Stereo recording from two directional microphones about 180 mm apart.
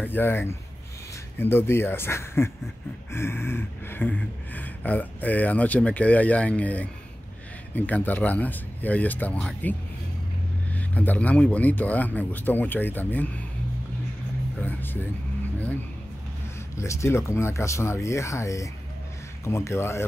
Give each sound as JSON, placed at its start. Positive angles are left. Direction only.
{"t": 0.0, "sound": "speech", "side_deg": 10}
{"t": 14.6, "sound": "speech", "side_deg": 10}
{"t": 16.7, "sound": "speech", "side_deg": 15}